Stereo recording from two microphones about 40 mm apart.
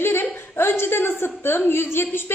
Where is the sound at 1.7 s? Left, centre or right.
Left.